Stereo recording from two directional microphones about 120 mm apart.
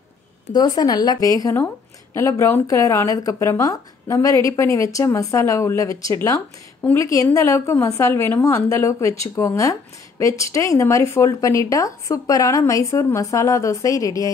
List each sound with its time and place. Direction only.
0.5 s a woman's voice: 35° left (ahead or behind)